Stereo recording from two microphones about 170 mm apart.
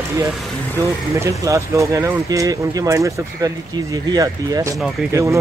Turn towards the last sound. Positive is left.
turn(degrees=-15)  # may be behind; listen again after turning